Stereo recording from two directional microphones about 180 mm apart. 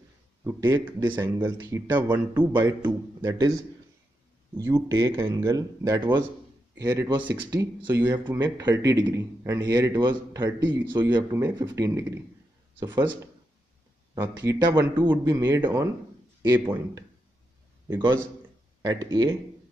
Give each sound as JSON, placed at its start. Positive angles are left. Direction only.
{"t": 0.4, "sound": "speech", "side_deg": -15}
{"t": 2.3, "sound": "speech", "side_deg": -10}
{"t": 4.6, "sound": "a man's voice", "side_deg": -15}